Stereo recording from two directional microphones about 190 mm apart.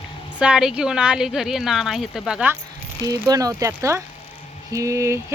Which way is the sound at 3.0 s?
20° right (ahead or behind).